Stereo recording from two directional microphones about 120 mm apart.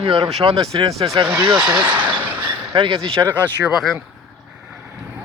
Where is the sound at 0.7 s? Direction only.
40° right (ahead or behind).